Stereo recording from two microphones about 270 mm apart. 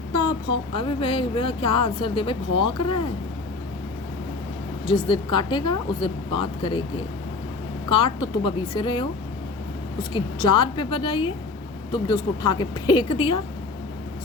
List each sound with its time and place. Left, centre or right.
0.1 s speech: centre
4.9 s a woman's voice: centre